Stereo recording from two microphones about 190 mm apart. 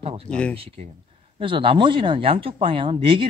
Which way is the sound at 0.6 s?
30° right (ahead or behind).